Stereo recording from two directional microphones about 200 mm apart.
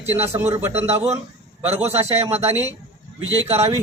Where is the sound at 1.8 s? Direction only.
30° right (ahead or behind).